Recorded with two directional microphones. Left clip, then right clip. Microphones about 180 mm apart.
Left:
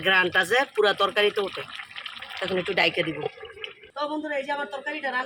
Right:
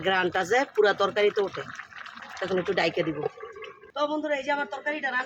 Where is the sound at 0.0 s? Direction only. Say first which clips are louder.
Left 4 dB; 25° right (ahead or behind).